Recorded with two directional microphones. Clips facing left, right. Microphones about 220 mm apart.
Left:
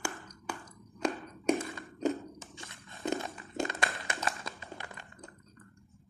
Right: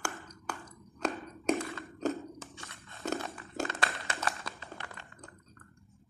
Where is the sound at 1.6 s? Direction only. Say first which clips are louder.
Right 1 dB; 15° left (ahead or behind).